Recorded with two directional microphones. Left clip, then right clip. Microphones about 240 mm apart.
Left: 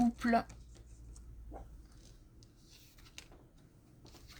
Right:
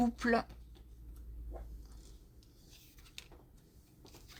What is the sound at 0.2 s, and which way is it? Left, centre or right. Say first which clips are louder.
Speech: right 1 dB; right.